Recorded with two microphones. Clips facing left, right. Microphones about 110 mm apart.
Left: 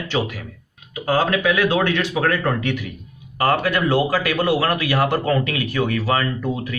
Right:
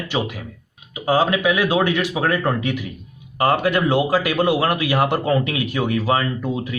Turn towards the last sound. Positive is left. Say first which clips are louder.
# even
turn(degrees=-20)  # may be behind; listen again after turning